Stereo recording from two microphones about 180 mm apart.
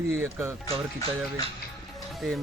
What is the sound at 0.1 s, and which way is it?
Speech, 15° right (ahead or behind).